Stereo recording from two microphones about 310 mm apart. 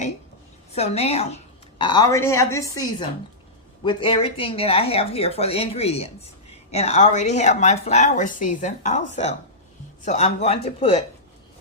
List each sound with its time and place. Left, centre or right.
0.7 s a woman's voice: centre